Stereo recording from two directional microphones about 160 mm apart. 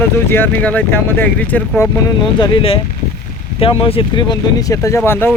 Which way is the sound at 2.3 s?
35° left (ahead or behind).